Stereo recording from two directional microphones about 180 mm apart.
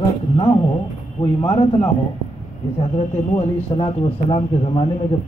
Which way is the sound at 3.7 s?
25° left (ahead or behind).